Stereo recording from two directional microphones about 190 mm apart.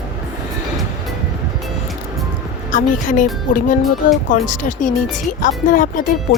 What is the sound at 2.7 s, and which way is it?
Speech, 45° left (ahead or behind).